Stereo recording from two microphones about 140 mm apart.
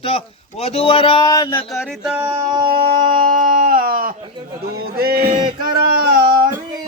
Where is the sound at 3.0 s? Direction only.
70° right (ahead or behind); by 6.2 s 90° right.